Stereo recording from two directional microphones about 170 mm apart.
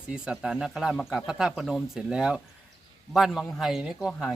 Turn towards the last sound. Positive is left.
turn(degrees=0)  # may be behind; listen again after turning